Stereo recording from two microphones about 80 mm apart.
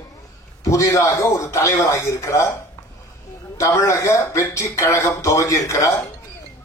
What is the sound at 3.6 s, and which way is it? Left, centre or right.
A man's voice, left.